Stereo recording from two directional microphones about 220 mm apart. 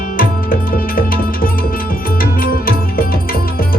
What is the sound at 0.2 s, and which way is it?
Music, 40° left (ahead or behind).